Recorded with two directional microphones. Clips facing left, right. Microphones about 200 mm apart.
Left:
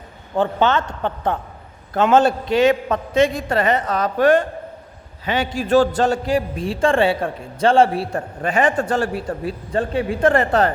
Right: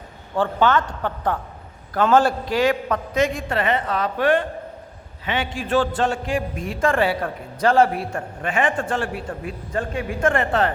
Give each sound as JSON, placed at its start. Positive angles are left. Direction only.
{"t": 0.3, "sound": "a man's voice", "side_deg": 25}